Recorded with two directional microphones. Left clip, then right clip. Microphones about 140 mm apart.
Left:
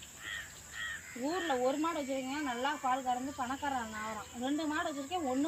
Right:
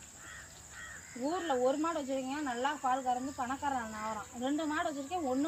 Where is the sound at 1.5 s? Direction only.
5° left (ahead or behind).